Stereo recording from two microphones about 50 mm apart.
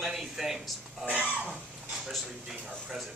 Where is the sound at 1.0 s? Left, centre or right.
Right.